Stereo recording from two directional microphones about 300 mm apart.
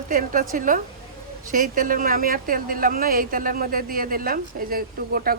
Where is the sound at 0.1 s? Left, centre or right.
Right.